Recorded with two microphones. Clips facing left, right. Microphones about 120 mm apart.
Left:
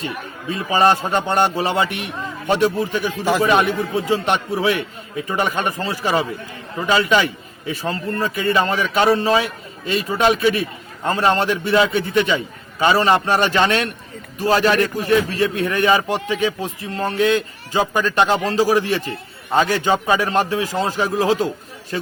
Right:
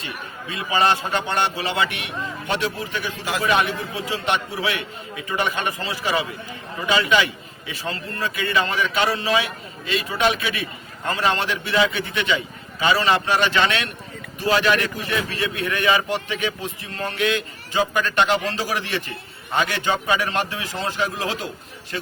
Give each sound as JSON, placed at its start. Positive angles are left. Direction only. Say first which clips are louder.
{"t": 0.5, "sound": "a man's voice", "louder": "left 4 dB", "side_deg": 45}